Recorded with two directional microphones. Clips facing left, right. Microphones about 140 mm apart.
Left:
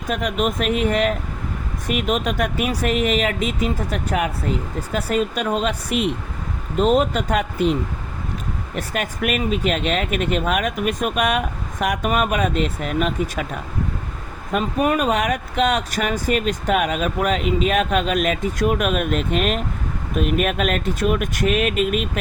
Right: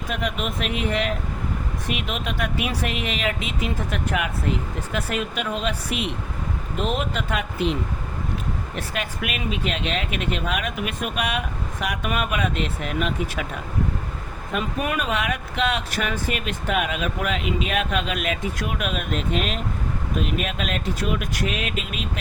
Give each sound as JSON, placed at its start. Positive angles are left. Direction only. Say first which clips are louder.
{"t": 0.1, "sound": "speech", "louder": "left 6 dB", "side_deg": 45}
{"t": 8.7, "sound": "speech", "louder": "left 8 dB", "side_deg": 45}
{"t": 14.5, "sound": "speech", "louder": "left 6 dB", "side_deg": 40}